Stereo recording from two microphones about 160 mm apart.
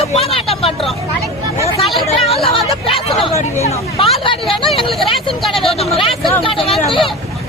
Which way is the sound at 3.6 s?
40° left (ahead or behind).